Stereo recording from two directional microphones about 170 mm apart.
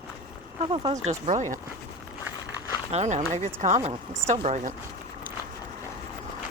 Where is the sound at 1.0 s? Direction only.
45° right (ahead or behind).